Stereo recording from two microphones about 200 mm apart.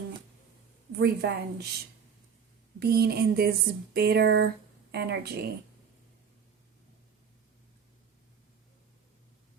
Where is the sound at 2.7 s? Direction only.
50° right (ahead or behind).